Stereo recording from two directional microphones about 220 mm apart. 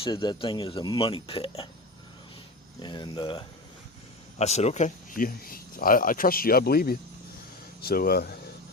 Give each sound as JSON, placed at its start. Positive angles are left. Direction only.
{"t": 0.0, "sound": "speech", "side_deg": 20}
{"t": 2.8, "sound": "speech", "side_deg": 20}